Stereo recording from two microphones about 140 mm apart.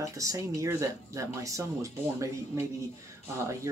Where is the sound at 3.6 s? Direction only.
20° right (ahead or behind).